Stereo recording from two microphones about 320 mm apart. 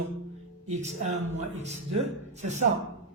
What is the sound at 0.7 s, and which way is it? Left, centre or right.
Speech, right.